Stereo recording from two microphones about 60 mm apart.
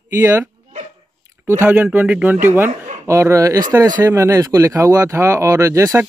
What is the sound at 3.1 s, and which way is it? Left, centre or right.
Speech, right.